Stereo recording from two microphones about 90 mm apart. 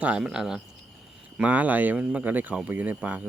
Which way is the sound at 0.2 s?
5° right (ahead or behind).